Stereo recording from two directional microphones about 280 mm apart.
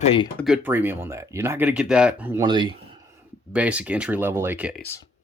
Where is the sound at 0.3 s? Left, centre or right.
Centre.